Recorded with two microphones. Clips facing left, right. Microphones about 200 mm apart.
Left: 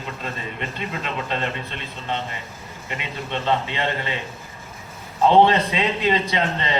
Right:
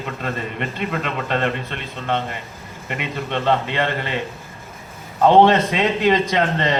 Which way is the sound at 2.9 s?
55° right (ahead or behind).